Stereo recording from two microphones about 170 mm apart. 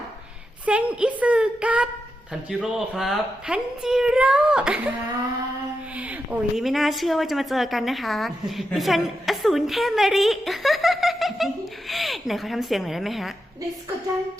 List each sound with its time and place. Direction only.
0.6 s speech: 10° right (ahead or behind)
6.0 s a woman's voice: 10° right (ahead or behind)